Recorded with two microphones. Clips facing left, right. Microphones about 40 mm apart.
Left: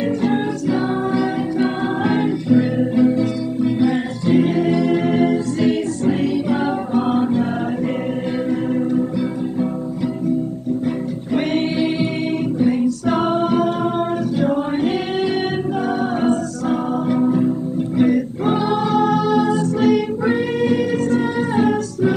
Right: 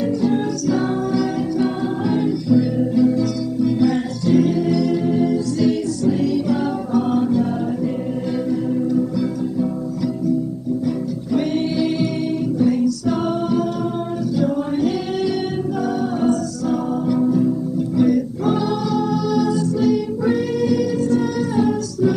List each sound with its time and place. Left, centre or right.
0.0 s music: left
2.0 s music: left
5.0 s music: left
11.3 s music: left
13.0 s a capella: left
14.4 s music: left
18.9 s music: left
20.2 s music: left